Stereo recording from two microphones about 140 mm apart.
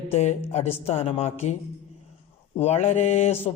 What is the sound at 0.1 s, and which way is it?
A woman's voice, 50° left (ahead or behind).